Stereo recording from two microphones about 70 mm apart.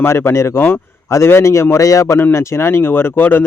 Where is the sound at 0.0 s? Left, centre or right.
Left.